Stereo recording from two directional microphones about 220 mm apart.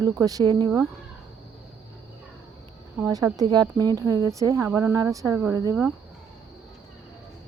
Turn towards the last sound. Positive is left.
turn(degrees=-15)  # may be behind; listen again after turning